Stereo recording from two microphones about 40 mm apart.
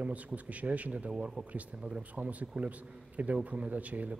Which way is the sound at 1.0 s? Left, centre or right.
Right.